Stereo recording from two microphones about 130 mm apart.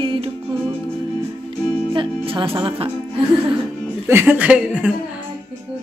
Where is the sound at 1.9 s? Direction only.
40° right (ahead or behind).